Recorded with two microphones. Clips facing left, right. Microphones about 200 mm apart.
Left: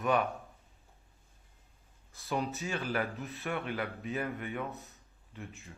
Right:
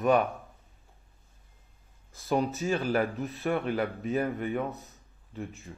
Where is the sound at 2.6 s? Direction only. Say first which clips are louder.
Right 7 dB; 35° right (ahead or behind).